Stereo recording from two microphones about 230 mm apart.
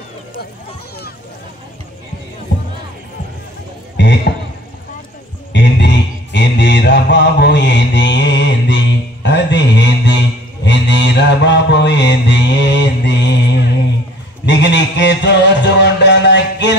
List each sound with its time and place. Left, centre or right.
2.5 s music: left
3.9 s a sound: left
5.5 s mantra: left
14.4 s music: left